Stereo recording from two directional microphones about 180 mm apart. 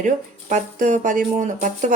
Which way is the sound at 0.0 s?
45° right (ahead or behind).